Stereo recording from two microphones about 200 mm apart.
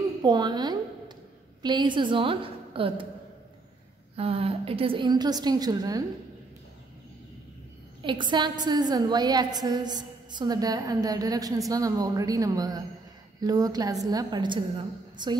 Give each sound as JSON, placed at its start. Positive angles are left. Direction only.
{"t": 0.2, "sound": "a sound", "side_deg": -20}
{"t": 1.6, "sound": "a woman's voice", "side_deg": -20}
{"t": 4.2, "sound": "a woman's voice", "side_deg": -30}
{"t": 8.0, "sound": "a woman's voice", "side_deg": -25}